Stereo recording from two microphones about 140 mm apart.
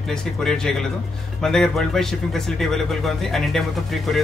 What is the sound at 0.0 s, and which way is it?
Speech, 5° left (ahead or behind).